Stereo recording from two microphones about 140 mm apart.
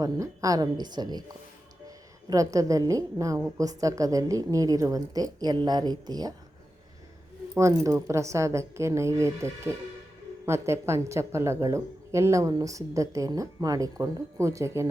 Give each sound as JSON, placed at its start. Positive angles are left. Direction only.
{"t": 0.0, "sound": "speech", "side_deg": -25}
{"t": 2.3, "sound": "speech", "side_deg": -25}
{"t": 7.5, "sound": "speech", "side_deg": -20}